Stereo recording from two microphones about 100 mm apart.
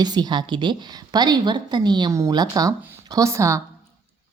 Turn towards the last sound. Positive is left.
turn(degrees=-30)  # may be behind; listen again after turning